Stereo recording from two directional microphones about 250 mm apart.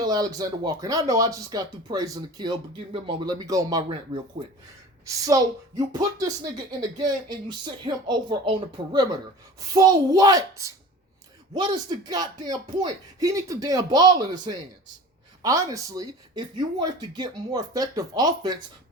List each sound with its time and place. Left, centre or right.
0.0 s a woman's voice: centre